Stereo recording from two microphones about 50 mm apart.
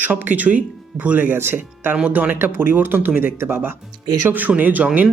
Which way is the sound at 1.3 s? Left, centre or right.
Right.